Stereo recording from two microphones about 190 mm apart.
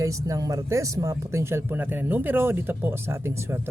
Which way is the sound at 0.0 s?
15° right (ahead or behind).